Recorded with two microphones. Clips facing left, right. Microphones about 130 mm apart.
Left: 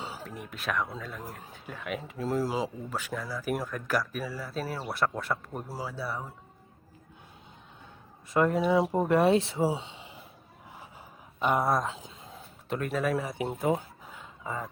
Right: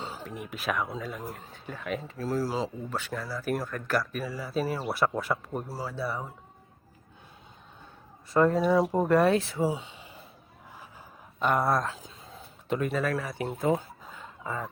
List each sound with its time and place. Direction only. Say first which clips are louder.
0.0 s speech: right 2 dB; 5° left (ahead or behind)
2.1 s speech: left 1 dB; 20° left (ahead or behind); by 5.6 s 5° right (ahead or behind)
5.6 s speech: even; 10° left (ahead or behind)
8.5 s speech: right 1 dB; 15° left (ahead or behind)
8.8 s speech: right 1 dB; 5° left (ahead or behind)
9.0 s speech: even; 20° left (ahead or behind)
11.3 s speech: right 1 dB; 15° left (ahead or behind)
12.6 s speech: right 1 dB; centre (ahead or behind)
13.1 s speech: left 1 dB; 20° left (ahead or behind)
13.5 s a sound: right 2 dB; 10° left (ahead or behind)